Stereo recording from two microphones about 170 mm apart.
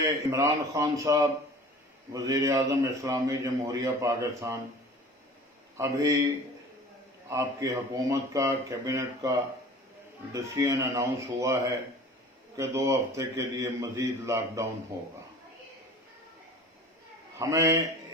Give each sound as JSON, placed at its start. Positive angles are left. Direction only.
{"t": 0.0, "sound": "a man's voice", "side_deg": -20}
{"t": 5.7, "sound": "a man's voice", "side_deg": -15}
{"t": 7.3, "sound": "a man's voice", "side_deg": -20}
{"t": 10.3, "sound": "a man's voice", "side_deg": -20}
{"t": 12.5, "sound": "a man's voice", "side_deg": -20}
{"t": 17.3, "sound": "a man's voice", "side_deg": -20}